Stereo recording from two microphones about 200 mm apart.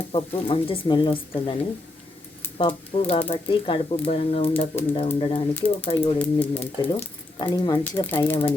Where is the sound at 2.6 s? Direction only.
30° left (ahead or behind).